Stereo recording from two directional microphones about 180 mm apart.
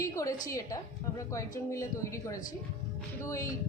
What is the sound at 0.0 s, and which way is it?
Speech, 20° left (ahead or behind).